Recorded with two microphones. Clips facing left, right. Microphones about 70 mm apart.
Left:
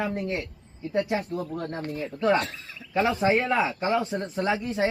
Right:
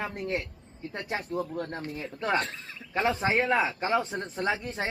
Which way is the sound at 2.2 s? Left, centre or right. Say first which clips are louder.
Left 5 dB; right.